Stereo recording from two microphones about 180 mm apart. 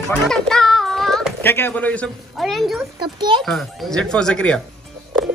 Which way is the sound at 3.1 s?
25° right (ahead or behind).